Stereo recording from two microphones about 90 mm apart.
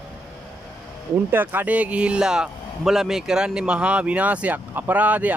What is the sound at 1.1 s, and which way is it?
Speech, 20° right (ahead or behind).